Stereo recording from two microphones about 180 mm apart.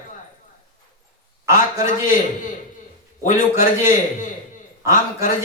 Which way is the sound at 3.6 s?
45° left (ahead or behind).